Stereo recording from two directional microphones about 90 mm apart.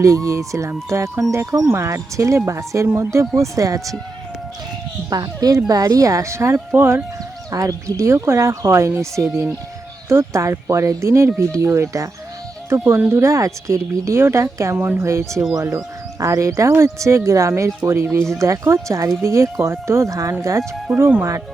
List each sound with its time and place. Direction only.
0.0 s speech: 35° right (ahead or behind)
5.0 s speech: 45° right (ahead or behind); by 7.0 s 25° right (ahead or behind)
7.5 s speech: 35° right (ahead or behind)
10.1 s speech: 30° right (ahead or behind)